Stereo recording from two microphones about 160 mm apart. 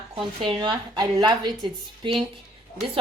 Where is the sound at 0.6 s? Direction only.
30° right (ahead or behind).